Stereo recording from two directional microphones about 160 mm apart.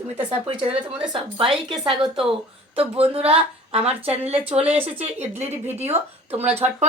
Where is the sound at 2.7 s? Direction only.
35° right (ahead or behind).